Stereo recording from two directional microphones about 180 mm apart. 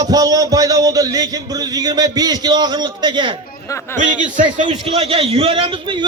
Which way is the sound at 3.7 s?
15° left (ahead or behind).